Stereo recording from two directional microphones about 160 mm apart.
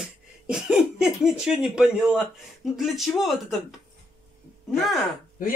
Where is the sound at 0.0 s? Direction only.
5° right (ahead or behind).